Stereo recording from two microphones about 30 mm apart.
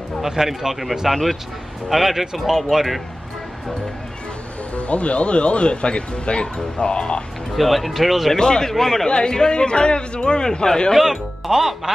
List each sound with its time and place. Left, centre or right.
0.2 s speech: centre
1.9 s speech: centre
4.7 s speech: left
7.5 s speech: centre
8.4 s a man's voice: left
8.7 s speech: centre
9.0 s a man's voice: left
11.0 s speech: centre